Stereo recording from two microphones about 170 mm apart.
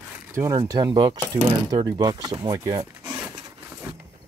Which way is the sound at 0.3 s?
20° right (ahead or behind).